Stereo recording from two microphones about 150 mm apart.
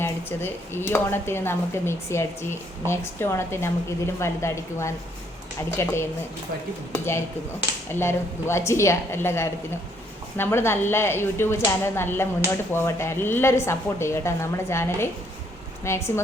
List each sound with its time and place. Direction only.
0.0 s a woman's voice: 15° left (ahead or behind)